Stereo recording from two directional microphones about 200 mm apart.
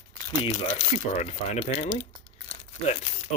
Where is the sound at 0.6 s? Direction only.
35° left (ahead or behind).